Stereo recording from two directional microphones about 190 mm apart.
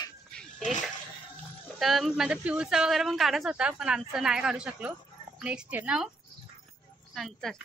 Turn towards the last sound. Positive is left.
turn(degrees=0)  # may be behind; listen again after turning